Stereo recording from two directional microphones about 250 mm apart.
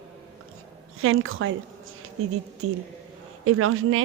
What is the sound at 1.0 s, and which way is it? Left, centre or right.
A woman's voice, right.